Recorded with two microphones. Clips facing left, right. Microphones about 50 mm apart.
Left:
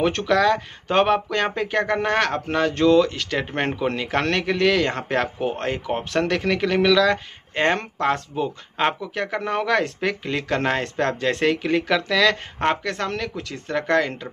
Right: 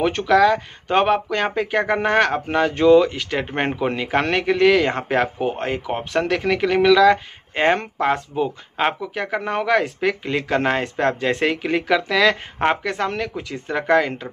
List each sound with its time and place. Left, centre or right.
0.0 s speech: centre